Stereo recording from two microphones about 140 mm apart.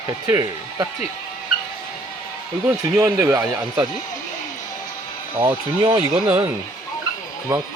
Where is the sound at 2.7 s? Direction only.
15° right (ahead or behind).